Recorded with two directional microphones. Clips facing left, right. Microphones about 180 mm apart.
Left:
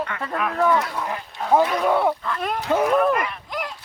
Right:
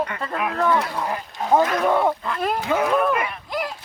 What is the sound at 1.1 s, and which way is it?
Speech, 5° right (ahead or behind).